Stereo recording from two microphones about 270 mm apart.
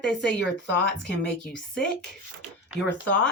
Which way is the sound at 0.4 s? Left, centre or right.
Left.